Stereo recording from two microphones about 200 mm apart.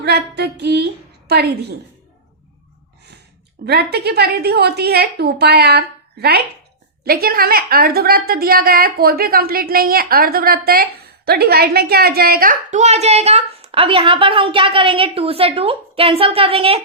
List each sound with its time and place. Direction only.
0.0 s speech: 55° right (ahead or behind)
3.7 s a woman's voice: 50° right (ahead or behind); by 16.8 s 30° right (ahead or behind)